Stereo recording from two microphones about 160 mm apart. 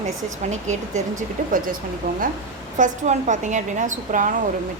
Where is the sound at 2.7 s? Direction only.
50° right (ahead or behind).